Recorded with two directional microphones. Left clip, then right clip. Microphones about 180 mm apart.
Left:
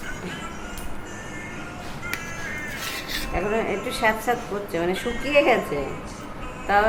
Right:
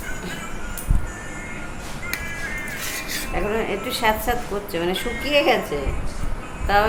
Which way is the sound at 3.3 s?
15° right (ahead or behind).